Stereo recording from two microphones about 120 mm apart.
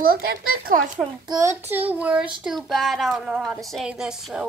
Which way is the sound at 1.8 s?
10° right (ahead or behind).